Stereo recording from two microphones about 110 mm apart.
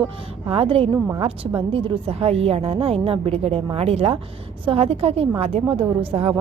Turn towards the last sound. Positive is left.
turn(degrees=-60)  # may be behind; listen again after turning